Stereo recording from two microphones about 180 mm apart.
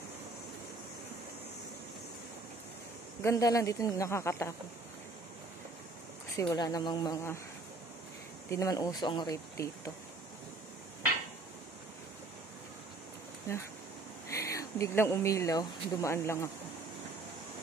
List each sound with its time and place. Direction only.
3.2 s speech: 15° left (ahead or behind)
6.3 s speech: 15° left (ahead or behind)
8.5 s speech: 20° left (ahead or behind)
14.3 s speech: 15° left (ahead or behind)